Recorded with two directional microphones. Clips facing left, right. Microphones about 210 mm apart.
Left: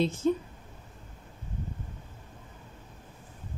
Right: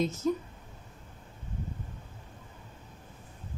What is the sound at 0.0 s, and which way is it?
Speech, 30° left (ahead or behind).